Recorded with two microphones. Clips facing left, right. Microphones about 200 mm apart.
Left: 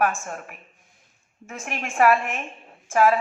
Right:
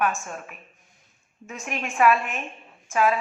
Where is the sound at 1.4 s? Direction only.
55° left (ahead or behind).